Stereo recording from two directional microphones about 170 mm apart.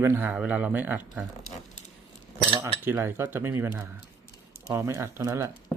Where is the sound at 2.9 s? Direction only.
15° right (ahead or behind).